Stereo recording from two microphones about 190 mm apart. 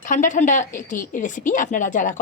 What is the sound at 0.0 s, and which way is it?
Speech, 40° left (ahead or behind).